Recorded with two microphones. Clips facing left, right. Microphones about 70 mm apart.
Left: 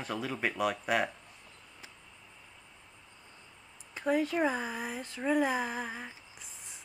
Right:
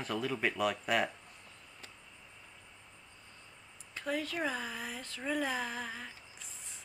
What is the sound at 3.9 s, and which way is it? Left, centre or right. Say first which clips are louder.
Speech: left 7 dB; left.